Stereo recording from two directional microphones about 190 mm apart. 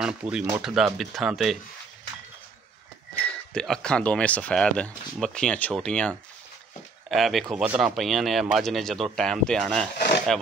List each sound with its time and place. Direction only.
0.0 s speech: 5° right (ahead or behind)
3.2 s speech: 5° left (ahead or behind)
9.9 s a sound: 60° left (ahead or behind)